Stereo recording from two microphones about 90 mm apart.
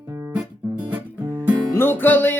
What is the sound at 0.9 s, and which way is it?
Music, 20° right (ahead or behind).